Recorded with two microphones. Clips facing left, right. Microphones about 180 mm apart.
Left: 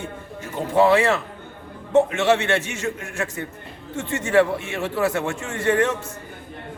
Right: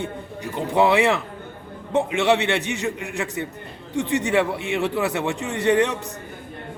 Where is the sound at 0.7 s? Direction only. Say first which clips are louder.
Left 1 dB; 15° right (ahead or behind).